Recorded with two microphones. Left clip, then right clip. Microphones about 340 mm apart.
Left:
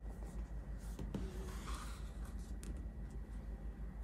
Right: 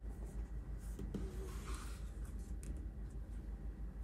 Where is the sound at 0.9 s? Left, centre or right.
Centre.